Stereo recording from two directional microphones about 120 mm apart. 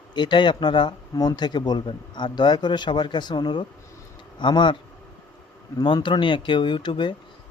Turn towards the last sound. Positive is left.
turn(degrees=40)  # may be behind; listen again after turning